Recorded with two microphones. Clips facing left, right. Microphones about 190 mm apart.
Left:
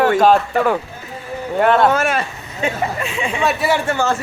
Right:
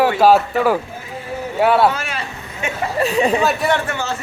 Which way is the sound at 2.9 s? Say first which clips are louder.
Right 7 dB; 40° right (ahead or behind).